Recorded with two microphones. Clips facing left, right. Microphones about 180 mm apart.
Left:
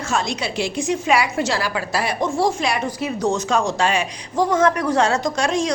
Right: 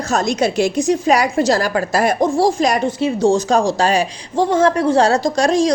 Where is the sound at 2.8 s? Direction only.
25° right (ahead or behind).